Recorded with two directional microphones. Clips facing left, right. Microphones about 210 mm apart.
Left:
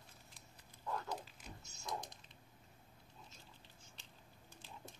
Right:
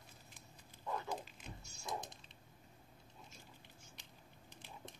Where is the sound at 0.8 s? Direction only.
15° right (ahead or behind).